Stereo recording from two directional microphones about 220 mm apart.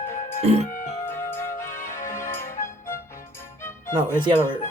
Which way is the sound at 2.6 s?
40° left (ahead or behind).